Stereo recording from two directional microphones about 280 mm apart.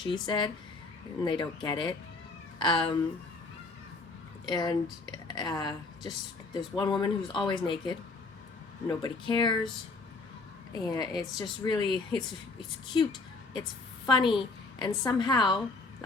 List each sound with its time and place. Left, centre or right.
0.0 s speech: centre
4.4 s speech: centre
10.7 s speech: centre
14.1 s speech: centre